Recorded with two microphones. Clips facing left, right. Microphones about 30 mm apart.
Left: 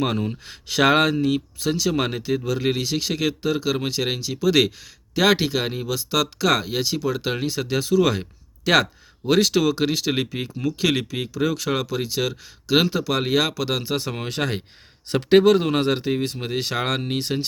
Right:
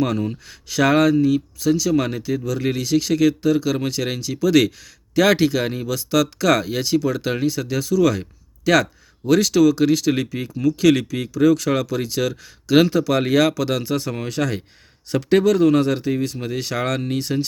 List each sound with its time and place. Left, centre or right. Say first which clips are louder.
0.4 s speech: left 1 dB; left
13.8 s speech: right 2 dB; left